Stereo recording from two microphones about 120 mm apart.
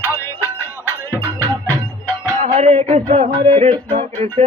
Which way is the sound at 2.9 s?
65° right (ahead or behind).